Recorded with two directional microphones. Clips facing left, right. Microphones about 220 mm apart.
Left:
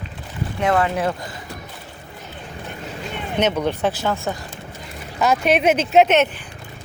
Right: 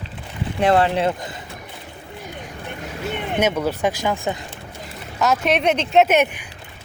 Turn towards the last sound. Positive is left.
turn(degrees=-10)  # may be behind; listen again after turning